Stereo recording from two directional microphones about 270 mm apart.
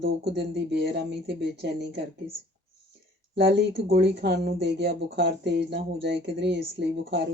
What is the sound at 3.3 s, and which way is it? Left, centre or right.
Speech, right.